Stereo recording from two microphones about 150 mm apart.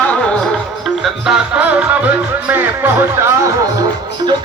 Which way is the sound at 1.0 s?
5° right (ahead or behind).